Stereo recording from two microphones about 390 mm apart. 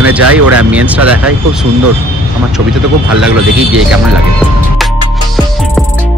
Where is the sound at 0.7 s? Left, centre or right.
Centre.